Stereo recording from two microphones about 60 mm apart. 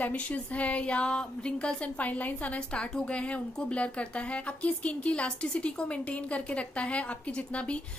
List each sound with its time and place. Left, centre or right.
0.0 s a woman's voice: left